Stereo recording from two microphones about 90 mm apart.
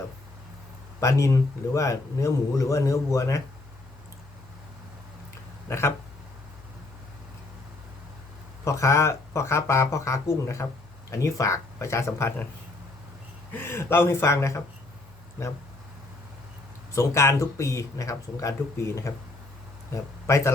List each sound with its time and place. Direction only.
0.9 s a man's voice: 35° left (ahead or behind)
5.6 s speech: 30° left (ahead or behind)
8.6 s a man's voice: 35° left (ahead or behind)
13.5 s speech: 25° left (ahead or behind)
16.9 s a man's voice: 30° left (ahead or behind)
19.9 s speech: 30° left (ahead or behind)